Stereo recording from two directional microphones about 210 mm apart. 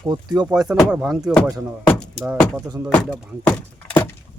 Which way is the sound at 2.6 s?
15° right (ahead or behind).